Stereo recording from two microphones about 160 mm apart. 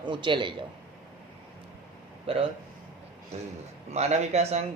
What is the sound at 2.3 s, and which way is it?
A man's voice, 35° right (ahead or behind).